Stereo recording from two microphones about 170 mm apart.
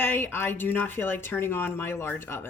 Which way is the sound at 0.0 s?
10° left (ahead or behind).